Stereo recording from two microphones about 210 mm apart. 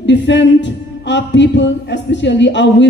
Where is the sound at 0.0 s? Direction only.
55° left (ahead or behind).